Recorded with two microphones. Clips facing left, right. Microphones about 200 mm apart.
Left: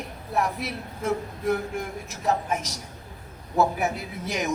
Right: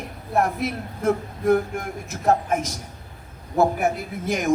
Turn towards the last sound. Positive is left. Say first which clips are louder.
# right 6 dB
turn(degrees=-50)  # may be behind; listen again after turning